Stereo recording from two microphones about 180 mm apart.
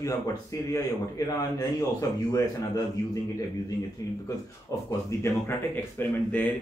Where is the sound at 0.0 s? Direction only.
20° left (ahead or behind).